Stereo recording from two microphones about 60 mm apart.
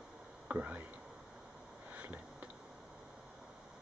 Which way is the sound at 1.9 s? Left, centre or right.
Right.